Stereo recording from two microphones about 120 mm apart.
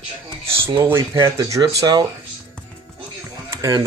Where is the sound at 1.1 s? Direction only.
30° right (ahead or behind).